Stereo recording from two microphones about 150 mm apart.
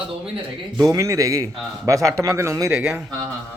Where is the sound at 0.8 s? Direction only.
20° right (ahead or behind).